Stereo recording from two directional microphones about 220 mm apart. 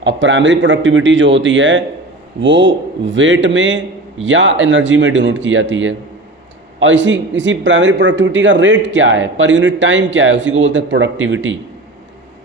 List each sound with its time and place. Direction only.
0.0 s a man's voice: 55° right (ahead or behind)